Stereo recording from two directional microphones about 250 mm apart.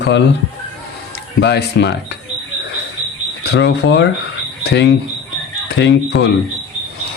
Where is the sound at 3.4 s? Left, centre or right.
Left.